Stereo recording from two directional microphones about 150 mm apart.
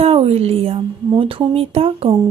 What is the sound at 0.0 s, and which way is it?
A woman's voice, 40° right (ahead or behind).